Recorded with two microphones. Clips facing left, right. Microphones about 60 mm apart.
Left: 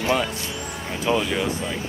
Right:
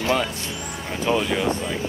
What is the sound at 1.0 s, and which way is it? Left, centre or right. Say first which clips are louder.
Speech: right 1 dB; centre.